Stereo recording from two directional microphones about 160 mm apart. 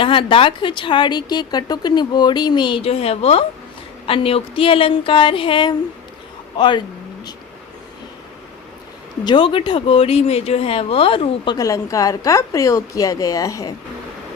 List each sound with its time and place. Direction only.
0.0 s a woman's voice: 30° left (ahead or behind)
9.2 s speech: 30° left (ahead or behind)
11.5 s a woman's voice: 20° left (ahead or behind)